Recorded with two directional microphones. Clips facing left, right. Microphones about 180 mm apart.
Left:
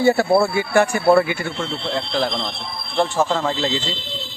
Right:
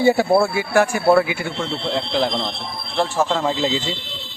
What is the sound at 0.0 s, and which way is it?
Speech, 10° right (ahead or behind).